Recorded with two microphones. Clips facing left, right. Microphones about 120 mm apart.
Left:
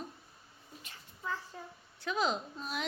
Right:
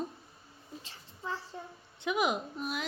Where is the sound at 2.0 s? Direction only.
15° right (ahead or behind).